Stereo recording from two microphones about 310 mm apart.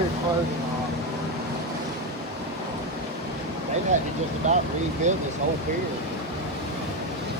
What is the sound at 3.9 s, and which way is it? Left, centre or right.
Speech, right.